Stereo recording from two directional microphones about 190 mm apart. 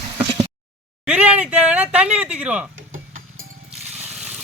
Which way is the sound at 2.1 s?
5° right (ahead or behind).